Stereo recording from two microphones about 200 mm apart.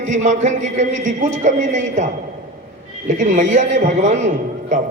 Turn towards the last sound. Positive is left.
turn(degrees=-40)  # may be behind; listen again after turning